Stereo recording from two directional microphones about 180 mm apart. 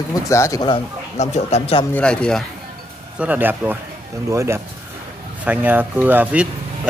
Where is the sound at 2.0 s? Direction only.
5° left (ahead or behind).